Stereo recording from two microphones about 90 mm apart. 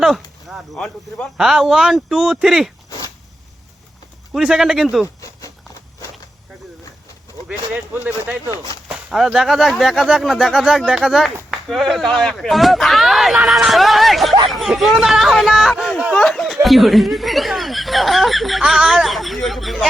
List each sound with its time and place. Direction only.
0.0 s a sound: centre (ahead or behind)
1.4 s speech: 5° right (ahead or behind)
4.4 s speech: 5° right (ahead or behind)
7.7 s speech: 15° right (ahead or behind)
8.9 s speech: 5° right (ahead or behind)
15.7 s speech: 10° left (ahead or behind)